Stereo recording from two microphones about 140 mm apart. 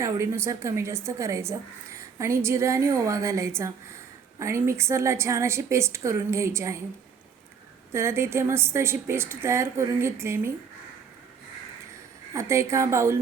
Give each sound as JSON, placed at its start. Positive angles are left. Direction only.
{"t": 0.0, "sound": "a woman's voice", "side_deg": -20}
{"t": 7.9, "sound": "a woman's voice", "side_deg": -20}
{"t": 12.3, "sound": "a woman's voice", "side_deg": -20}